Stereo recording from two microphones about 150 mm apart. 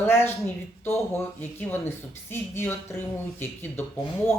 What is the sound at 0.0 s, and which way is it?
Speech, 15° left (ahead or behind).